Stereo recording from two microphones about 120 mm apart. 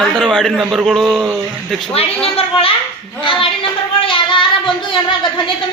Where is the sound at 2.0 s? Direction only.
55° left (ahead or behind).